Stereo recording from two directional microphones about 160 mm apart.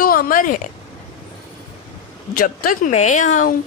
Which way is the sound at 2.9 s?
50° left (ahead or behind).